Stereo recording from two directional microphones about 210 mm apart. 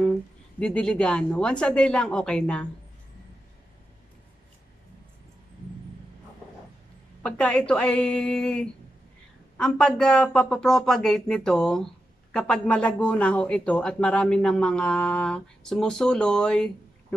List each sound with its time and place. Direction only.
0.6 s speech: 5° left (ahead or behind)
7.2 s speech: 5° left (ahead or behind)